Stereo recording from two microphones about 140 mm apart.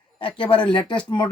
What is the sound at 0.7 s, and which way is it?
Speech, 35° left (ahead or behind).